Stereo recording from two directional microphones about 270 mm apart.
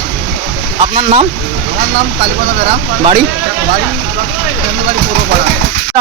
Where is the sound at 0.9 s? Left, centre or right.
Right.